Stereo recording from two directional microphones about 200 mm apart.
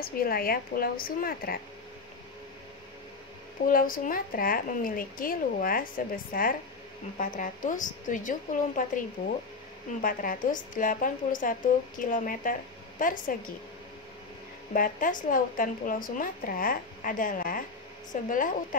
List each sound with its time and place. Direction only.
0.0 s a woman's voice: 45° left (ahead or behind)
3.6 s a woman's voice: 45° left (ahead or behind)
10.0 s a woman's voice: 45° left (ahead or behind)
14.7 s a woman's voice: 40° left (ahead or behind)